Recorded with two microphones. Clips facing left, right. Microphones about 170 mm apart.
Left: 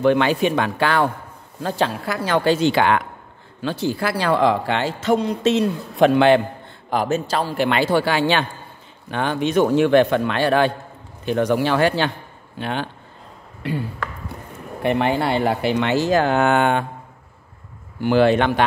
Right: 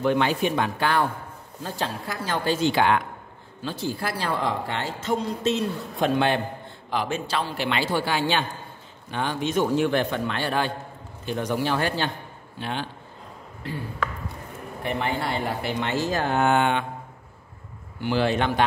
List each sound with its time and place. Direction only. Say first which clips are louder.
0.0 s a man's voice: left 5 dB; 80° left
6.9 s a man's voice: left 6 dB; 45° left (ahead or behind); by 8.5 s 75° left (ahead or behind)
9.1 s a man's voice: left 6 dB; 65° left (ahead or behind); by 12.1 s 85° left
12.5 s a man's voice: left 5 dB; 60° left (ahead or behind)
14.8 s a man's voice: left 8 dB; 75° left (ahead or behind)
18.0 s speech: left 7 dB; 60° left (ahead or behind)